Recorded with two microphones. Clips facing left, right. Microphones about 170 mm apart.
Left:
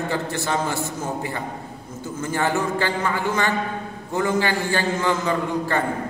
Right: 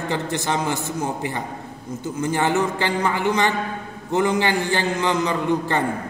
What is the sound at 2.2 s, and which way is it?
A man's voice, 20° right (ahead or behind).